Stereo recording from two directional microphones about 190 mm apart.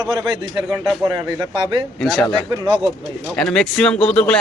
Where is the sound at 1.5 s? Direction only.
25° right (ahead or behind).